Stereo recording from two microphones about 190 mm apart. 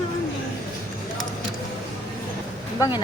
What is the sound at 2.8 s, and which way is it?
Speech, 20° left (ahead or behind).